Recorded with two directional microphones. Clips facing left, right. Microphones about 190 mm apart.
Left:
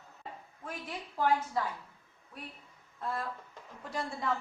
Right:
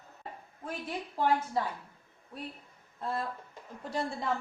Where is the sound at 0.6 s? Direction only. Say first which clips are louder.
Right 4 dB; 30° right (ahead or behind).